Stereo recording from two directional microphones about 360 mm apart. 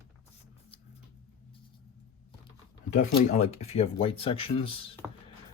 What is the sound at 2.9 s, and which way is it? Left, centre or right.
Speech, centre.